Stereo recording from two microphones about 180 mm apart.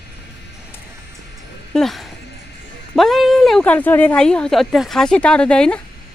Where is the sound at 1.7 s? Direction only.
Centre (ahead or behind).